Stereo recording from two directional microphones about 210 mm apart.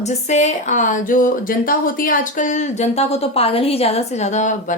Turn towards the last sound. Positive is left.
turn(degrees=35)  # may be behind; listen again after turning